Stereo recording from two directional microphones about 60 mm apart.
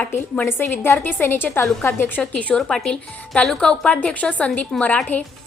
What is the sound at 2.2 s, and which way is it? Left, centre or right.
A woman's voice, left.